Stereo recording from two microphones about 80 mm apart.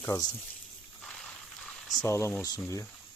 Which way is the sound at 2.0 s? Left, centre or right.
Left.